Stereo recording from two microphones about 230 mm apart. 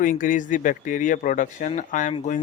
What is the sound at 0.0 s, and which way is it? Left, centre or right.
Speech, left.